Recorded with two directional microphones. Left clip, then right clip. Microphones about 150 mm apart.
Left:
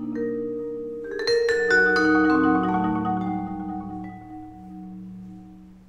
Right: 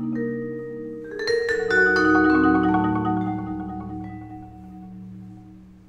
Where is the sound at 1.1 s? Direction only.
15° left (ahead or behind).